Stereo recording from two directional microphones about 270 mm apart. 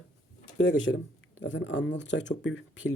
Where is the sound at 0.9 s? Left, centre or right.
Left.